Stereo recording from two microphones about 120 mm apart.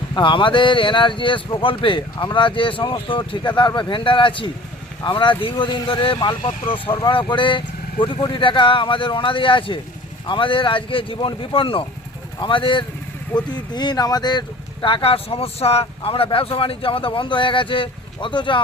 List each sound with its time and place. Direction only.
0.1 s speech: 45° left (ahead or behind)